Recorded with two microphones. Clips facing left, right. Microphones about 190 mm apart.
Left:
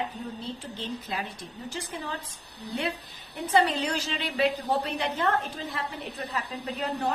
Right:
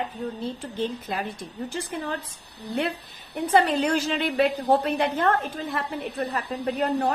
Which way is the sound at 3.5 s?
50° right (ahead or behind).